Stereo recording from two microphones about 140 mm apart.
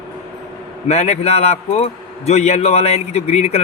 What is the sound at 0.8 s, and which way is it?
A man's voice, 50° left (ahead or behind).